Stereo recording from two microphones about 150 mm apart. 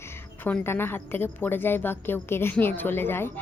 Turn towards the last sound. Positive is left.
turn(degrees=15)  # may be behind; listen again after turning